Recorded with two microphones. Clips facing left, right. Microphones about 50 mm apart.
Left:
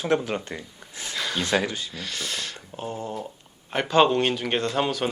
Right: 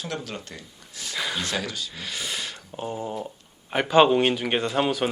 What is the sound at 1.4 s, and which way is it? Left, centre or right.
Speech, left.